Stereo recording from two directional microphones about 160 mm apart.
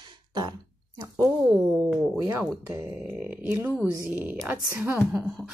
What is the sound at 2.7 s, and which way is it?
A woman's voice, 10° right (ahead or behind).